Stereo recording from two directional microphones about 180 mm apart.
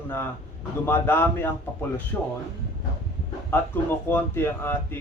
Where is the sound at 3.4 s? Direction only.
10° left (ahead or behind).